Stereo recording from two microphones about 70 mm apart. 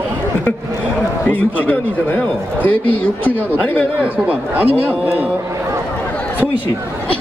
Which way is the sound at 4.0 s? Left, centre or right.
Right.